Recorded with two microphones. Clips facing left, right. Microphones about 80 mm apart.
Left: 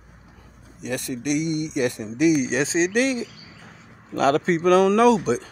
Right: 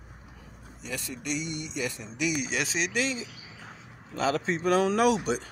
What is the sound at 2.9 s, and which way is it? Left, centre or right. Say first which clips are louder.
Speech: left 8 dB; left.